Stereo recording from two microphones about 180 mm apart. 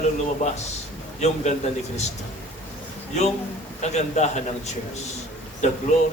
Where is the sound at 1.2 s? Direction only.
40° left (ahead or behind).